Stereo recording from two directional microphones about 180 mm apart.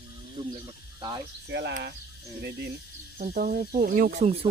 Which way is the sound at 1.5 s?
75° right (ahead or behind).